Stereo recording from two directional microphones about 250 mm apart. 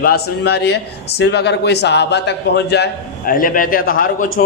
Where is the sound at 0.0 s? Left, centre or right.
Left.